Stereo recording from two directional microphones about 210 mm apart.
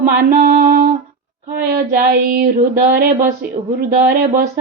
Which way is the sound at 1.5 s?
45° right (ahead or behind).